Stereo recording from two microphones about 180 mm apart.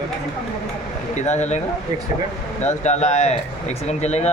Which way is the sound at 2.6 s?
40° left (ahead or behind).